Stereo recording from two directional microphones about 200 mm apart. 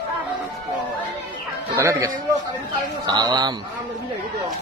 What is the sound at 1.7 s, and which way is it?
A man's voice, 15° right (ahead or behind).